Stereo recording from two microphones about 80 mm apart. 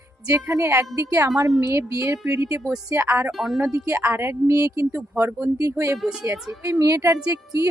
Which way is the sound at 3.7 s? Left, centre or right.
Right.